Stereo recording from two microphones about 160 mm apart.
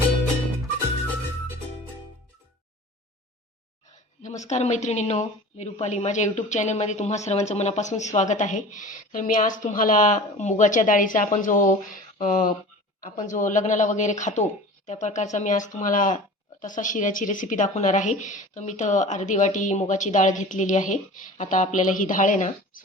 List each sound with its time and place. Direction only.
4.2 s a woman's voice: 45° left (ahead or behind)